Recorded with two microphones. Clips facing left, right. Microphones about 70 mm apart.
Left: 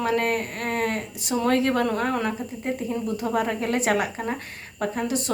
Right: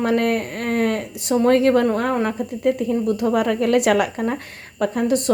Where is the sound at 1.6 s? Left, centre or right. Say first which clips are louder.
Right 6 dB; right.